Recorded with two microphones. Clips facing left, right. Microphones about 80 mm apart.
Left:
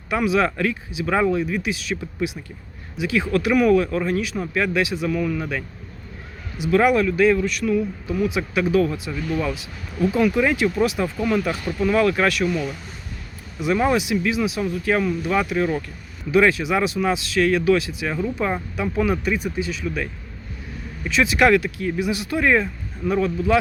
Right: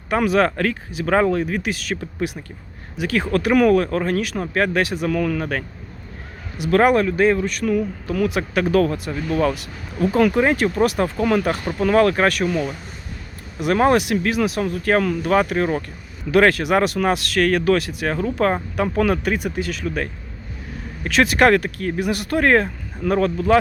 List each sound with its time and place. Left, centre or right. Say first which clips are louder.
0.1 s speech: right 2 dB; right
3.9 s speech: right 1 dB; right
7.8 s speech: right 1 dB; right
10.3 s speech: right 2 dB; right
10.8 s speech: right 3 dB; right
13.6 s speech: right 3 dB; right
16.3 s speech: right 2 dB; right
21.0 s speech: right 2 dB; right